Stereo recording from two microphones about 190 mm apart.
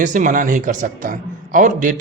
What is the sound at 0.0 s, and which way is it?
Speech, 40° right (ahead or behind).